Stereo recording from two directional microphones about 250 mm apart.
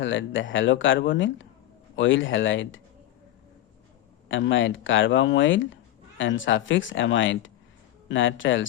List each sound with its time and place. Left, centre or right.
0.0 s speech: left
4.3 s speech: left